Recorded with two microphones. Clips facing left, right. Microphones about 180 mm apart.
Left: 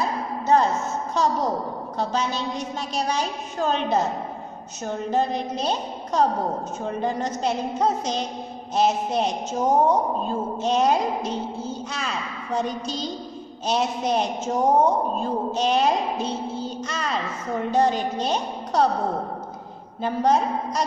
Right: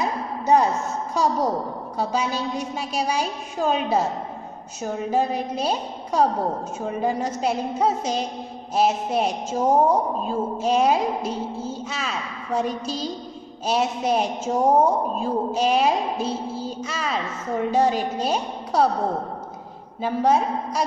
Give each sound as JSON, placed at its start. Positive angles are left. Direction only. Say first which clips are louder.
{"t": 0.0, "sound": "a sound", "louder": "right 1 dB", "side_deg": -15}
{"t": 1.1, "sound": "a woman's voice", "louder": "right 1 dB", "side_deg": -10}
{"t": 20.0, "sound": "a woman's voice", "louder": "right 1 dB", "side_deg": -5}